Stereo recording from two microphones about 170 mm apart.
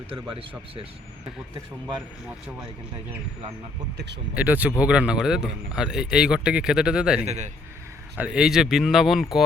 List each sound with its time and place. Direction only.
0.1 s speech: 30° right (ahead or behind)
3.9 s speech: 90° right
4.4 s speech: 10° right (ahead or behind)
7.3 s a man's voice: 45° right (ahead or behind)
8.2 s speech: 5° right (ahead or behind)